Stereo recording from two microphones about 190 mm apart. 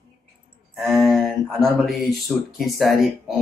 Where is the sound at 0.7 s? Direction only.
Centre (ahead or behind).